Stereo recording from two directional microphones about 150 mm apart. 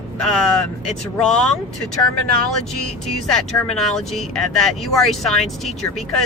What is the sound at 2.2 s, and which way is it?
Speech, 75° right (ahead or behind).